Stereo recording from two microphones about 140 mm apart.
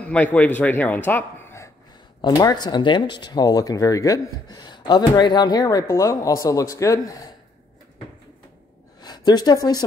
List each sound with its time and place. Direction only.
0.0 s speech: 10° left (ahead or behind)
2.2 s speech: 30° left (ahead or behind)
9.0 s a woman's voice: 30° left (ahead or behind)